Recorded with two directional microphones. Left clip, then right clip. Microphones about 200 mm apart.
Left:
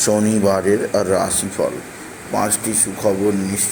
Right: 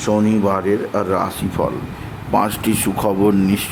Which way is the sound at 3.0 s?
25° right (ahead or behind).